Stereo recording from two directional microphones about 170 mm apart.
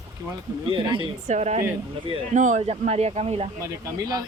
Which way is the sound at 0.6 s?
30° right (ahead or behind).